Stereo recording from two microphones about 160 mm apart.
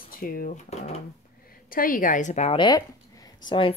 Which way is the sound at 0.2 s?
65° left (ahead or behind).